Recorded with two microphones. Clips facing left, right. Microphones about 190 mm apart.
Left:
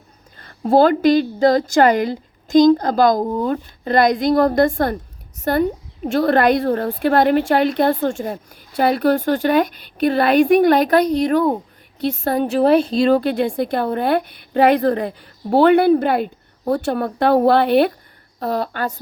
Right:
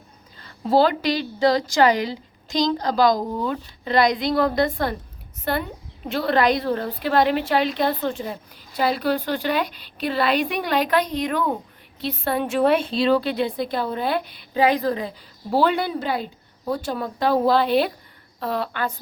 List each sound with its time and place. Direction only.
0.3 s a woman's voice: 50° left (ahead or behind)
18.3 s a woman's voice: 40° left (ahead or behind)